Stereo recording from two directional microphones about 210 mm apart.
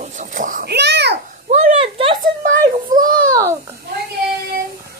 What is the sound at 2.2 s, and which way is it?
Speech, 40° right (ahead or behind).